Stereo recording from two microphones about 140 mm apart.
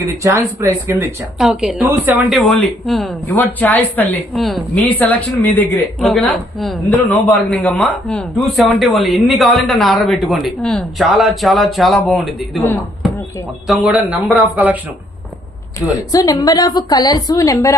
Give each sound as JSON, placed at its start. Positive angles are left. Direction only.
{"t": 0.0, "sound": "speech", "side_deg": -20}
{"t": 1.4, "sound": "speech", "side_deg": -5}
{"t": 2.3, "sound": "speech", "side_deg": 5}
{"t": 3.3, "sound": "speech", "side_deg": 10}
{"t": 4.4, "sound": "speech", "side_deg": 0}
{"t": 13.7, "sound": "speech", "side_deg": -5}
{"t": 15.9, "sound": "a woman's voice", "side_deg": 25}